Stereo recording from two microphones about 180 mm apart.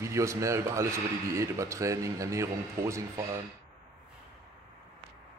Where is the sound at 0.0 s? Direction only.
15° right (ahead or behind).